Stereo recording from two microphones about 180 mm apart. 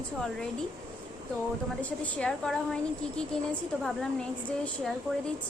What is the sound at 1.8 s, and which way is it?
A woman's voice, 10° left (ahead or behind).